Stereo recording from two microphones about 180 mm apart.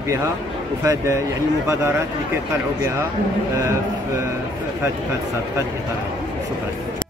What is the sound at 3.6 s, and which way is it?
Speech, 15° right (ahead or behind).